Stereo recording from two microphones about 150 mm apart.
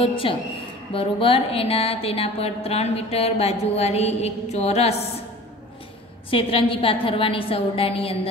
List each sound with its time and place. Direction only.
0.0 s a woman's voice: 35° left (ahead or behind)
6.3 s a woman's voice: 35° left (ahead or behind)